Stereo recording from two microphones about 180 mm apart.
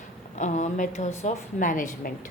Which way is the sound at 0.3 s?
40° left (ahead or behind).